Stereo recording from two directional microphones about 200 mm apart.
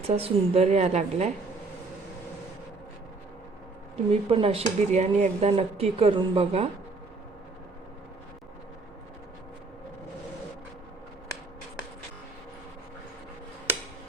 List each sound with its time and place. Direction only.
0.1 s a woman's voice: 30° right (ahead or behind)
4.1 s speech: 30° right (ahead or behind)